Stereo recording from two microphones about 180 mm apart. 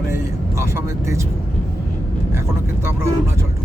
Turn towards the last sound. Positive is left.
turn(degrees=-15)  # may be behind; listen again after turning